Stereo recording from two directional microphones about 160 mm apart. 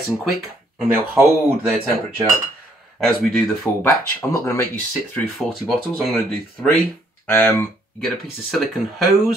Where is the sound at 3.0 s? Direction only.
5° left (ahead or behind).